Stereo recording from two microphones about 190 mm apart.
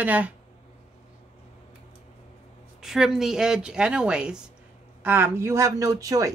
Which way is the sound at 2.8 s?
Centre (ahead or behind).